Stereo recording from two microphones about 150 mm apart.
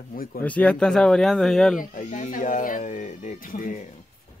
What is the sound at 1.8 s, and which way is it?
Speech, 60° left (ahead or behind).